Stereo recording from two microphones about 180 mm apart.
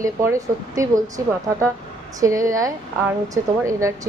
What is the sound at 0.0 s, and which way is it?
Speech, 15° right (ahead or behind).